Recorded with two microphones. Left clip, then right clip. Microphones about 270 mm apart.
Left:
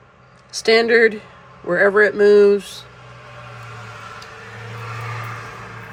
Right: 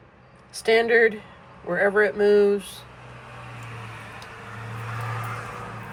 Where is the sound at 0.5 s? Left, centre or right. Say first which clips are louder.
Left 5 dB; centre.